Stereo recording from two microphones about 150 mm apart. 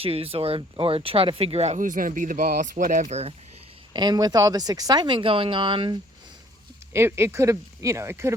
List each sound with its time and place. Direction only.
0.0 s speech: 40° right (ahead or behind)
3.9 s speech: 25° right (ahead or behind)
6.9 s speech: 15° right (ahead or behind)